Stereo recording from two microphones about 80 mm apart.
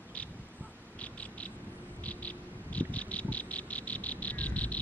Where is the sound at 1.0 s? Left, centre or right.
Centre.